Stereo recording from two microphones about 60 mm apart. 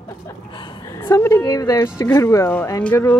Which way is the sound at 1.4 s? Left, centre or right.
Left.